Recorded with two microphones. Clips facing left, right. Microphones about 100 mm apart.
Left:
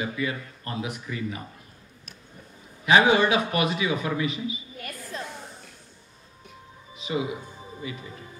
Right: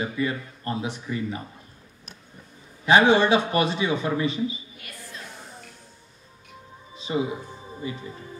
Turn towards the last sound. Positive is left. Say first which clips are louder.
# right 3 dB
turn(degrees=-30)  # may be behind; listen again after turning